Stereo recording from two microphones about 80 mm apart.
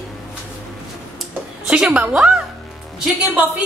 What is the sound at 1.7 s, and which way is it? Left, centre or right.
Speech, centre.